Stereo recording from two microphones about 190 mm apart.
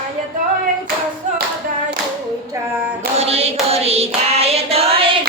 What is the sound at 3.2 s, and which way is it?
Hands, 30° right (ahead or behind).